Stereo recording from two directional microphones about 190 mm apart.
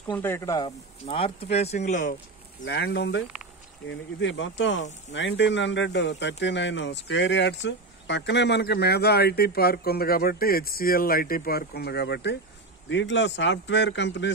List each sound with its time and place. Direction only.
0.1 s speech: 10° left (ahead or behind)
1.0 s speech: 30° left (ahead or behind)
2.6 s speech: 60° left (ahead or behind)